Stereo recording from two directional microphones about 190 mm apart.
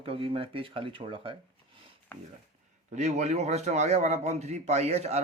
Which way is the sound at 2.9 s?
35° right (ahead or behind).